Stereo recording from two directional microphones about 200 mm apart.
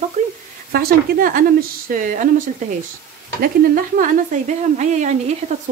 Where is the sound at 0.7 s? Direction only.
50° right (ahead or behind).